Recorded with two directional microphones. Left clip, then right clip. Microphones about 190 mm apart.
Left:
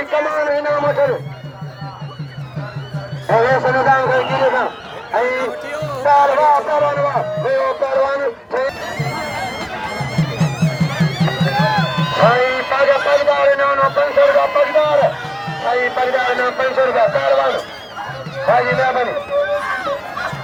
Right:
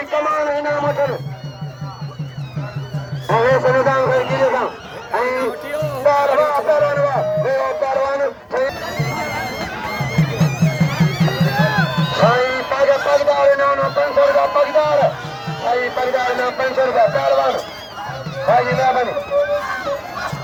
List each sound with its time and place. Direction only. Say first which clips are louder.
0.1 s a sound: left 1 dB; 40° left (ahead or behind)
3.2 s a sound: left 1 dB; 40° left (ahead or behind)
6.1 s music: left 3 dB; 40° left (ahead or behind)
8.8 s music: even; 50° right (ahead or behind)
12.1 s music: left 2 dB; 10° right (ahead or behind)
15.6 s speech: left 1 dB; centre (ahead or behind)
18.4 s run: even; centre (ahead or behind)